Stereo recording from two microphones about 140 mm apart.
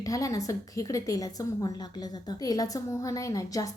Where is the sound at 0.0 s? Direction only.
25° left (ahead or behind).